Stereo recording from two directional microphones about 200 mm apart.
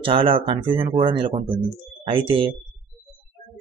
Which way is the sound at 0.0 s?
25° right (ahead or behind).